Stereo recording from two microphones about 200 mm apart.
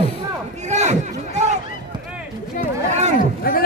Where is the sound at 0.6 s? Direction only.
35° right (ahead or behind).